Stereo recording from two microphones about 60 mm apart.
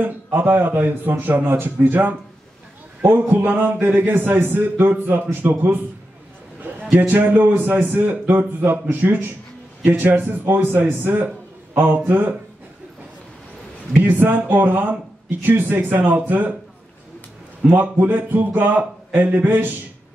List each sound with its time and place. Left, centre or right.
0.0 s speech: right
3.3 s speech: right
6.9 s speech: right
14.0 s speech: right
17.6 s speech: right